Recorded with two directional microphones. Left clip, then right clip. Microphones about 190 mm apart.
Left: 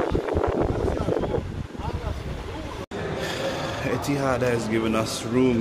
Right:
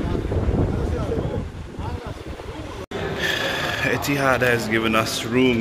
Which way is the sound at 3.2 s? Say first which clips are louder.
Right 6 dB; centre (ahead or behind).